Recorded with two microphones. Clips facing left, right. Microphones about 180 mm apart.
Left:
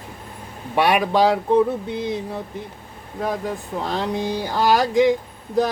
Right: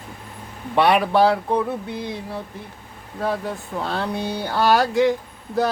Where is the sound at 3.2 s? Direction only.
15° left (ahead or behind).